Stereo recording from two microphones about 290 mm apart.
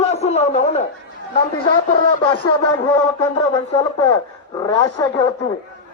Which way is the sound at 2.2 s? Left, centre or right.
Centre.